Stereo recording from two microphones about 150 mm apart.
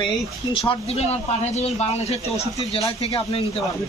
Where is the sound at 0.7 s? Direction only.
45° left (ahead or behind).